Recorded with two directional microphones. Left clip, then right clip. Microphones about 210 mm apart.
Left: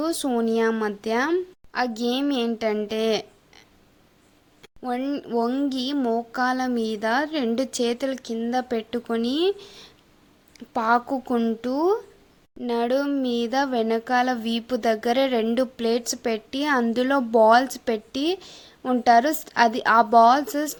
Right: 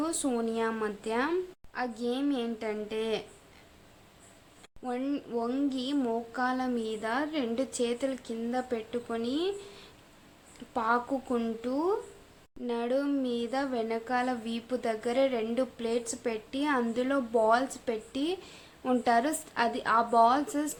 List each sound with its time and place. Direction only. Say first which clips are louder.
0.0 s speech: left 7 dB; 30° left (ahead or behind)
4.6 s speech: left 7 dB; 35° left (ahead or behind)